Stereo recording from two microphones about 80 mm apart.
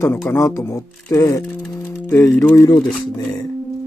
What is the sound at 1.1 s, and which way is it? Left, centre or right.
Speech, left.